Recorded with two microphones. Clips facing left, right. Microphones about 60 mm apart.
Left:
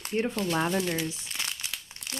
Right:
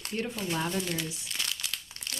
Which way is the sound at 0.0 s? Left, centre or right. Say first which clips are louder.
Left 5 dB; left.